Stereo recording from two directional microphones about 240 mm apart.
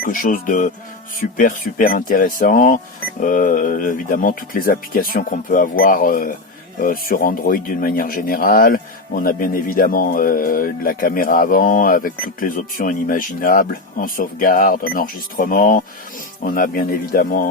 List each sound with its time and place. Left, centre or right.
0.0 s speech: left